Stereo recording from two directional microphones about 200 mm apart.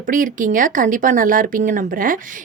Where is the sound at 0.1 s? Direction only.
40° right (ahead or behind).